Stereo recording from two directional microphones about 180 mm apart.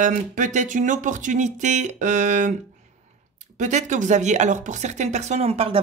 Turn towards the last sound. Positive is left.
turn(degrees=-35)  # may be behind; listen again after turning